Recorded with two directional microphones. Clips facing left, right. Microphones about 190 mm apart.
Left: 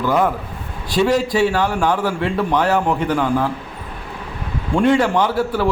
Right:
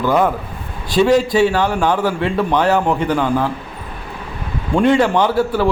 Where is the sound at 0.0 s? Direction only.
25° right (ahead or behind).